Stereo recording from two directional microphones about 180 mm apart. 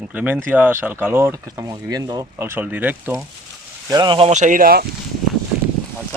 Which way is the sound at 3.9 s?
25° right (ahead or behind).